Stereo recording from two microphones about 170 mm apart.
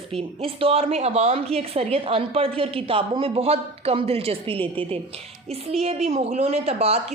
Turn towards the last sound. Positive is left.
turn(degrees=-35)  # may be behind; listen again after turning